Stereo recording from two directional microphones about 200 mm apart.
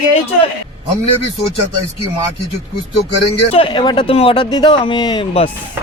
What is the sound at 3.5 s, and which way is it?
Speech, 25° left (ahead or behind).